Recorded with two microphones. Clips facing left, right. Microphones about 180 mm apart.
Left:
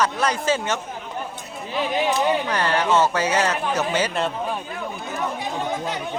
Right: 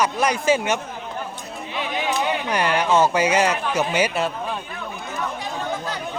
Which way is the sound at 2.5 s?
15° right (ahead or behind).